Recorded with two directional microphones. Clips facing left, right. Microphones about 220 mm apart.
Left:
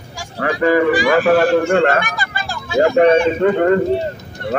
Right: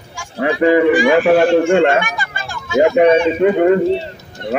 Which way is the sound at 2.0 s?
35° left (ahead or behind).